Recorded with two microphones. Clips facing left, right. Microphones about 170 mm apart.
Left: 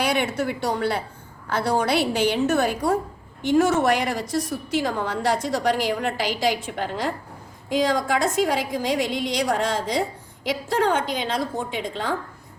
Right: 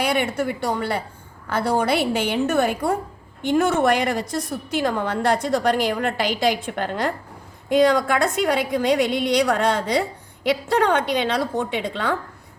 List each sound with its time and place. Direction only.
0.0 s a woman's voice: 55° right (ahead or behind)